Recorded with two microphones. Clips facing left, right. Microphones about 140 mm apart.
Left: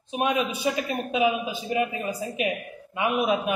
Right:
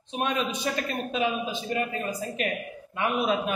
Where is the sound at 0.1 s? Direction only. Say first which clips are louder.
Left 3 dB; 10° left (ahead or behind).